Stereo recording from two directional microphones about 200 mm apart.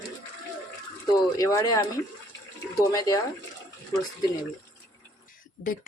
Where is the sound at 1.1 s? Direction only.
20° left (ahead or behind).